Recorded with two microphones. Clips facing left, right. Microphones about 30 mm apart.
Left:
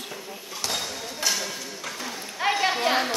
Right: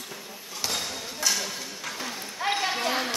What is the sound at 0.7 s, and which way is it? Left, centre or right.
Basketball bounce, centre.